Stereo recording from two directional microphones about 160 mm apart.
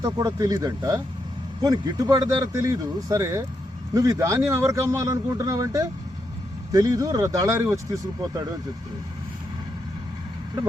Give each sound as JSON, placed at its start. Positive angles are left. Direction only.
{"t": 0.0, "sound": "a man's voice", "side_deg": -20}